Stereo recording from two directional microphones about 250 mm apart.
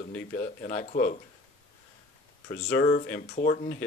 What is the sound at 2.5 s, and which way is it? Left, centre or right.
Speech, left.